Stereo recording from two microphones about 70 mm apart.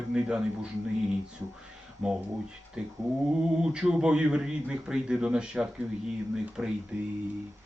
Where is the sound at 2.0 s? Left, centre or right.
Centre.